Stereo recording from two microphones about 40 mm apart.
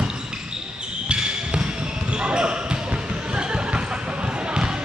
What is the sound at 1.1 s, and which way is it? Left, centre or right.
Basketball bounce, right.